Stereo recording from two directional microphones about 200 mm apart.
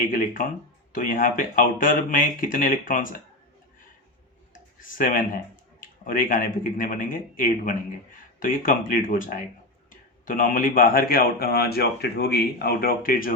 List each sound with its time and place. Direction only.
0.0 s speech: 45° left (ahead or behind)
4.8 s speech: 40° left (ahead or behind)